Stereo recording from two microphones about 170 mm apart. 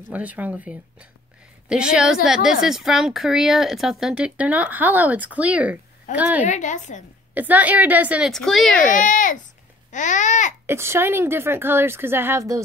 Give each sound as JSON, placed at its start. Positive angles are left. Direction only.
{"t": 0.1, "sound": "speech", "side_deg": -10}
{"t": 6.4, "sound": "babbling", "side_deg": 45}
{"t": 7.3, "sound": "speech", "side_deg": -10}
{"t": 8.8, "sound": "babbling", "side_deg": 50}
{"t": 10.7, "sound": "speech", "side_deg": -15}